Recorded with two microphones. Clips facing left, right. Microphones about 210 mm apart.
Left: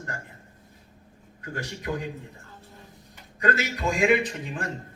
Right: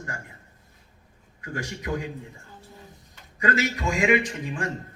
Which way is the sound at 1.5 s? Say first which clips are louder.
Right 2 dB; 15° right (ahead or behind).